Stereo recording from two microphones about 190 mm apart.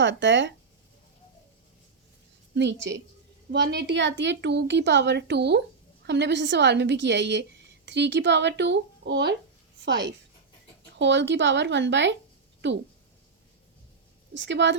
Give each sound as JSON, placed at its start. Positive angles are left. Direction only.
{"t": 0.0, "sound": "speech", "side_deg": -70}
{"t": 2.6, "sound": "a woman's voice", "side_deg": -70}
{"t": 14.3, "sound": "speech", "side_deg": -70}